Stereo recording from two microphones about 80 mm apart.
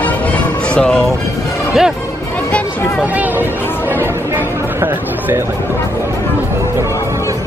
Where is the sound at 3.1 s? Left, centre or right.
Right.